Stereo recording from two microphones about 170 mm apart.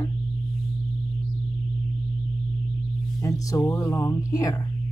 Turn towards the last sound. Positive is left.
turn(degrees=20)  # may be behind; listen again after turning